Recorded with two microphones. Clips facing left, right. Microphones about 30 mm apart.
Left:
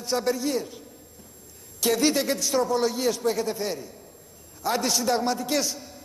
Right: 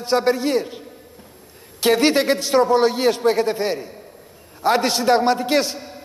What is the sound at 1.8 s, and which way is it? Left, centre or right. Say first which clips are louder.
A man's voice: right 6 dB; right.